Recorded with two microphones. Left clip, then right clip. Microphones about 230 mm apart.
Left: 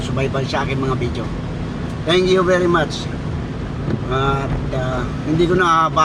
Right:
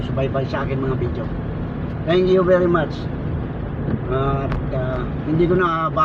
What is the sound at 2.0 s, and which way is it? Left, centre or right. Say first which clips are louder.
Speech: left 1 dB; left.